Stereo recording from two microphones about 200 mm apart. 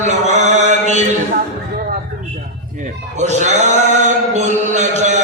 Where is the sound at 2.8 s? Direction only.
35° right (ahead or behind).